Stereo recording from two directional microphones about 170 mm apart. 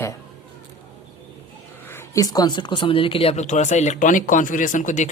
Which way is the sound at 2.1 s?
20° left (ahead or behind).